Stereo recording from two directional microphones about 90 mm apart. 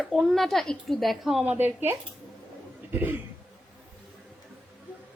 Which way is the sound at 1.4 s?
20° right (ahead or behind).